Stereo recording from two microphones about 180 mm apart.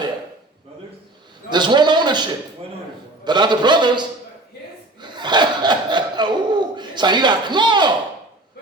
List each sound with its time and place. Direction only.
1.5 s a man's voice: 25° right (ahead or behind)
4.9 s laughter: 25° right (ahead or behind)